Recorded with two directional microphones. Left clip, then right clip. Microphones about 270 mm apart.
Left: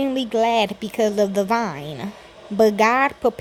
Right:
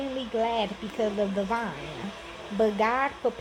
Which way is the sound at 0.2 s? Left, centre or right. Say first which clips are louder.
Left 8 dB; left.